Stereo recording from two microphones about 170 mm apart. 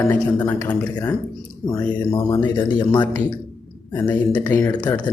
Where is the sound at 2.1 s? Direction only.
25° left (ahead or behind).